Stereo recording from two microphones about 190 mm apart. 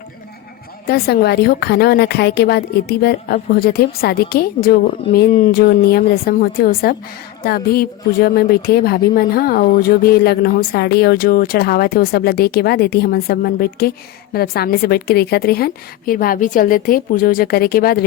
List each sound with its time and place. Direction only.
0.9 s a woman's voice: 55° left (ahead or behind)